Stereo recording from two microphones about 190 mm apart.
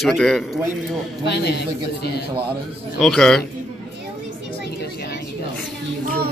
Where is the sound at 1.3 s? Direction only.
60° left (ahead or behind).